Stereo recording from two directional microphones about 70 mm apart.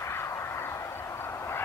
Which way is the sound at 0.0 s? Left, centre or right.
Left.